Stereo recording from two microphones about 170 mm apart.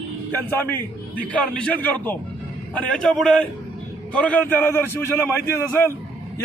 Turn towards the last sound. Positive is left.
turn(degrees=15)  # may be behind; listen again after turning